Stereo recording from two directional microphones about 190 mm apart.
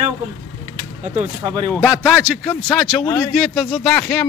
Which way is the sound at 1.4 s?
20° right (ahead or behind).